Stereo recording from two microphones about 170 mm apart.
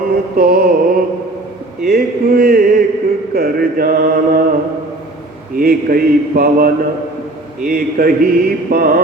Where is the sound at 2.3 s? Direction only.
65° right (ahead or behind).